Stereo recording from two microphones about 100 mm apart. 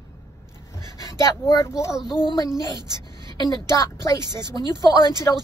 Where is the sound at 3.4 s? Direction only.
35° left (ahead or behind).